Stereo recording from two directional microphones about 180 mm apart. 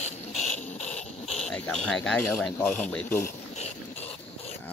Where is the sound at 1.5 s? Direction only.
5° left (ahead or behind).